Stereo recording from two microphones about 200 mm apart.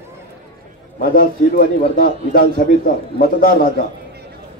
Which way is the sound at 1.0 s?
45° left (ahead or behind).